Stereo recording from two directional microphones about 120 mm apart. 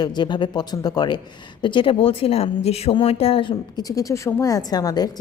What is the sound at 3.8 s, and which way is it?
A woman's voice, 30° left (ahead or behind).